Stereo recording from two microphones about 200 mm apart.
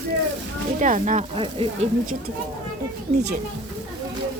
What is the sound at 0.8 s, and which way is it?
Speech, 40° right (ahead or behind).